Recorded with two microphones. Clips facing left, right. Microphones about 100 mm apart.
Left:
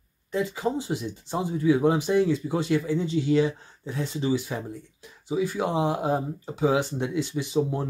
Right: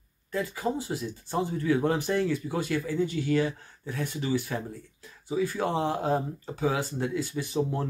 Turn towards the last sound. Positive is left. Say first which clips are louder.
# left 3 dB
turn(degrees=20)  # may be behind; listen again after turning